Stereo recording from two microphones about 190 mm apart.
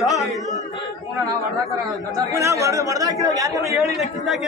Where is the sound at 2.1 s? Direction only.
15° right (ahead or behind).